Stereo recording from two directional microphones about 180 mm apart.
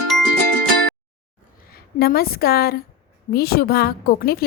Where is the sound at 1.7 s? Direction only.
55° left (ahead or behind).